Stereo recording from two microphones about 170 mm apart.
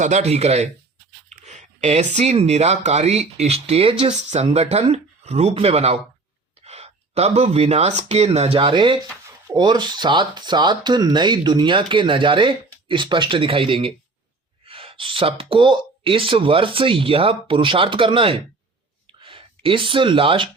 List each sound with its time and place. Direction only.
0.0 s speech: 40° right (ahead or behind)